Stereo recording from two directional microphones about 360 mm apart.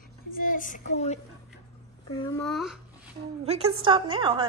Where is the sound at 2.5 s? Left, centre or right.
Centre.